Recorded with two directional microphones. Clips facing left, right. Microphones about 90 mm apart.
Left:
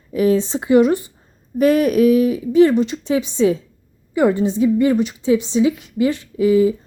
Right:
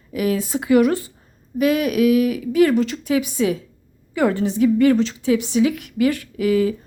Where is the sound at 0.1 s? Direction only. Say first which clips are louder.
Left 5 dB; 30° left (ahead or behind).